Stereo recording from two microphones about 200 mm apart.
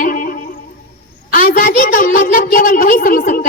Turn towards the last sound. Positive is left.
turn(degrees=45)  # may be behind; listen again after turning